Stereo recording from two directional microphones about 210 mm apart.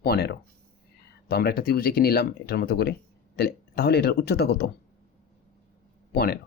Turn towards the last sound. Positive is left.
turn(degrees=45)  # may be behind; listen again after turning